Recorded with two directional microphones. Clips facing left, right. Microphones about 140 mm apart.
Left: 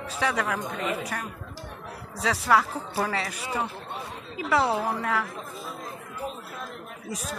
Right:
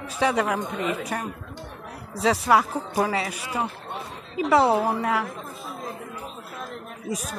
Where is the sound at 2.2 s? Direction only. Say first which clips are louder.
Right 3 dB; 20° right (ahead or behind).